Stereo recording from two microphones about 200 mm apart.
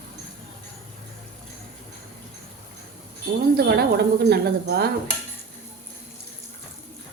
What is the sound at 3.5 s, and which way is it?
A woman's voice, 50° right (ahead or behind).